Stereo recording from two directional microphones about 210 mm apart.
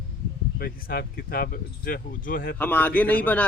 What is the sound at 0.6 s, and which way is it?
Speech, 45° left (ahead or behind).